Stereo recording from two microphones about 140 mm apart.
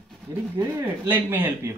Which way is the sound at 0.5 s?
20° right (ahead or behind).